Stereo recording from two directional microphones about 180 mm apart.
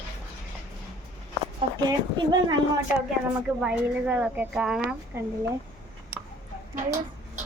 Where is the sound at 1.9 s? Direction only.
20° right (ahead or behind).